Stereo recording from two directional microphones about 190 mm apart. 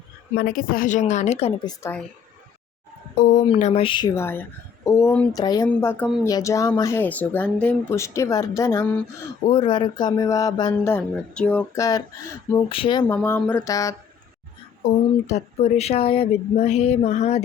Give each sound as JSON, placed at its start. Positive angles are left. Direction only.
{"t": 0.3, "sound": "speech", "side_deg": 50}
{"t": 1.6, "sound": "speech", "side_deg": 15}
{"t": 3.2, "sound": "speech", "side_deg": 40}
{"t": 3.4, "sound": "speech", "side_deg": 30}
{"t": 4.1, "sound": "speech", "side_deg": 10}
{"t": 5.6, "sound": "speech", "side_deg": 10}
{"t": 9.5, "sound": "speech", "side_deg": 25}
{"t": 12.6, "sound": "speech", "side_deg": 30}
{"t": 13.1, "sound": "speech", "side_deg": 10}
{"t": 14.8, "sound": "speech", "side_deg": 45}